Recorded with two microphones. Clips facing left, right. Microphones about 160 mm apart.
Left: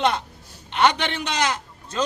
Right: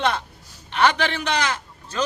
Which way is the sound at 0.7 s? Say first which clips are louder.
Even; 20° left (ahead or behind).